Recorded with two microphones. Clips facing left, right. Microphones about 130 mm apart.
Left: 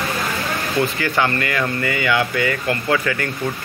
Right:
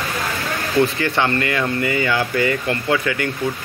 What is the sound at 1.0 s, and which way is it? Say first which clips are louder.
Speech: right 1 dB; 30° right (ahead or behind).